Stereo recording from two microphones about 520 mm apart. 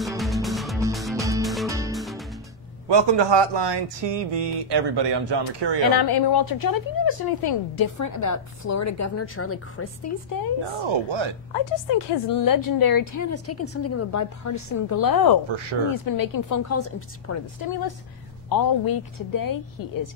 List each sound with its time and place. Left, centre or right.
0.0 s music: centre
2.9 s speech: right
5.9 s a woman's voice: left
10.9 s speech: right
12.4 s a woman's voice: left
15.5 s speech: right
16.1 s a woman's voice: left
17.6 s a woman's voice: left